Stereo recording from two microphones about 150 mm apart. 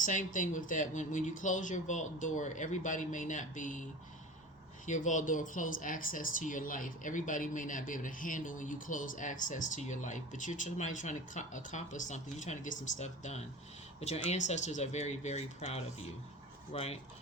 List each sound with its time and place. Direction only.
0.0 s speech: 60° left (ahead or behind)
4.9 s speech: 55° left (ahead or behind)